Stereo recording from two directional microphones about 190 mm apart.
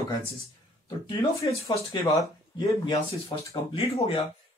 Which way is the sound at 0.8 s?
20° left (ahead or behind).